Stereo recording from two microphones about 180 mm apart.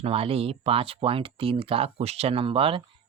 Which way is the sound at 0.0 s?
35° right (ahead or behind).